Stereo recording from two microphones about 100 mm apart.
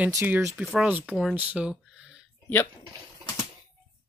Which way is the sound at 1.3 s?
15° right (ahead or behind).